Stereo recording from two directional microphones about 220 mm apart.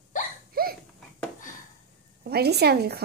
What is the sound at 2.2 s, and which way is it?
Speech, 45° right (ahead or behind).